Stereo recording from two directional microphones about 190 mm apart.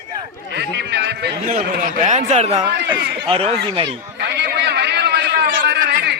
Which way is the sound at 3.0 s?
60° right (ahead or behind).